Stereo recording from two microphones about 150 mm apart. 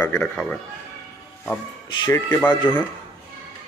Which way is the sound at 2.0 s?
25° left (ahead or behind).